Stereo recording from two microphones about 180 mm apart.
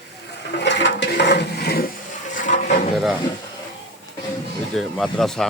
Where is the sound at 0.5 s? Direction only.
75° left (ahead or behind); by 1.9 s 60° left (ahead or behind).